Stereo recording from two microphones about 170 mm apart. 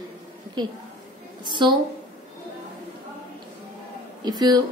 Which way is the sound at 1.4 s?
25° right (ahead or behind).